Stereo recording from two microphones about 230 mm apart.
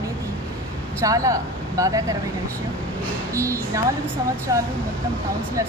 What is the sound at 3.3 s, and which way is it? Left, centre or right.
Speech, centre.